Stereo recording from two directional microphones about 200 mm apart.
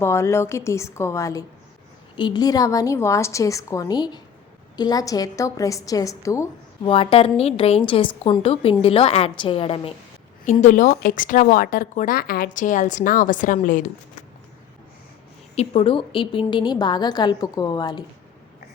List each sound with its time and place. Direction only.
0.0 s a woman's voice: 15° left (ahead or behind)
6.8 s a woman's voice: 25° left (ahead or behind)
15.5 s a woman's voice: 30° left (ahead or behind)